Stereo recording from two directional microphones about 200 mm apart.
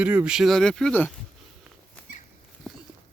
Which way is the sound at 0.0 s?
10° right (ahead or behind).